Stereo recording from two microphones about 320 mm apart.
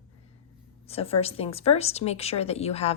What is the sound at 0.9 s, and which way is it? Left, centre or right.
Speech, centre.